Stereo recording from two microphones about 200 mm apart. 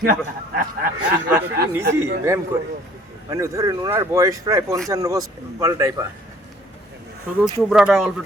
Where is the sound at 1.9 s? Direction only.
15° right (ahead or behind).